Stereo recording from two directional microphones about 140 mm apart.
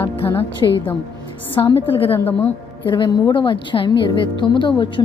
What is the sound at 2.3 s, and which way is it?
Speech, 10° left (ahead or behind).